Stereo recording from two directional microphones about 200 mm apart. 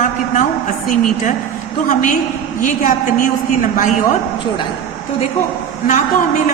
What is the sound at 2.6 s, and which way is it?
A woman's voice, 40° left (ahead or behind).